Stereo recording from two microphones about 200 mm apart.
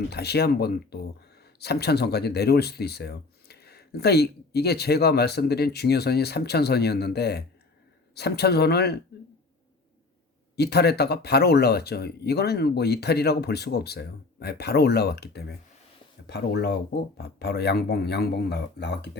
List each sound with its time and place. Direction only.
0.1 s speech: 55° left (ahead or behind)
10.5 s speech: 55° left (ahead or behind)